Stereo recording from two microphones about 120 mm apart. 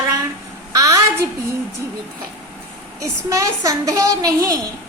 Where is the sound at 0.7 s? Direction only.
30° right (ahead or behind).